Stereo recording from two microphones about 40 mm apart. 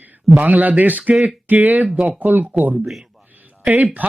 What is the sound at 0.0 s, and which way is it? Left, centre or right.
A man's voice, right.